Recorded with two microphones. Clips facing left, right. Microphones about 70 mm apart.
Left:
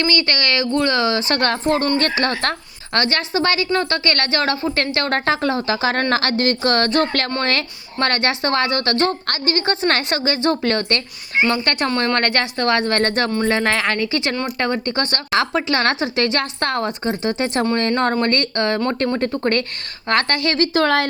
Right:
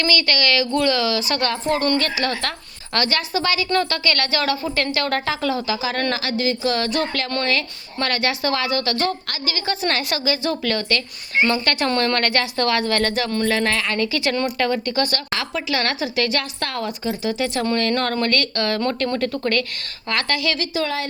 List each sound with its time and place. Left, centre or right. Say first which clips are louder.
0.0 s speech: left 1 dB; left
1.3 s a woman's voice: left 3 dB; left
6.1 s a woman's voice: left 4 dB; left
11.3 s speech: left 1 dB; left
11.9 s a woman's voice: right 1 dB; centre
12.1 s a woman's voice: left 1 dB; left
13.3 s speech: left 2 dB; left
13.7 s a woman's voice: left 3 dB; left
14.1 s a woman's voice: even; left
17.7 s a woman's voice: left 2 dB; left